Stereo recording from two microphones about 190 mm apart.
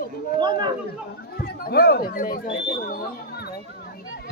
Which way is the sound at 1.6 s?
55° left (ahead or behind).